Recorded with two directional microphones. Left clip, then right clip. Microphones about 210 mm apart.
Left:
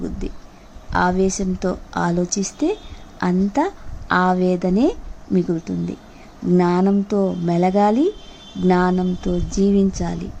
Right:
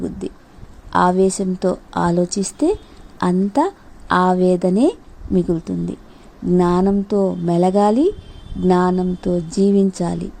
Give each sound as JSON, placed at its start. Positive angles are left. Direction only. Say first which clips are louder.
{"t": 0.9, "sound": "speech", "louder": "right 3 dB", "side_deg": -15}